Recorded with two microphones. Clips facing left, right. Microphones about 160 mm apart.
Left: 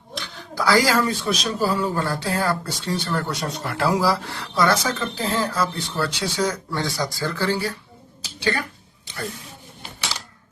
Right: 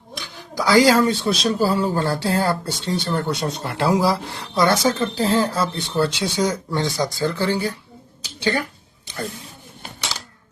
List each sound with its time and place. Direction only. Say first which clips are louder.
0.3 s speech: right 3 dB; 15° right (ahead or behind)